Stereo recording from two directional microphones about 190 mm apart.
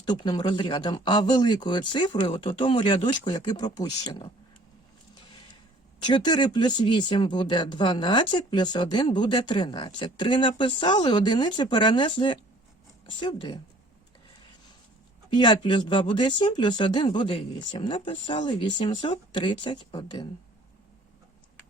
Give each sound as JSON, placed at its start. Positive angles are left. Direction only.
{"t": 0.0, "sound": "speech", "side_deg": 25}
{"t": 6.1, "sound": "speech", "side_deg": 20}
{"t": 15.3, "sound": "speech", "side_deg": 25}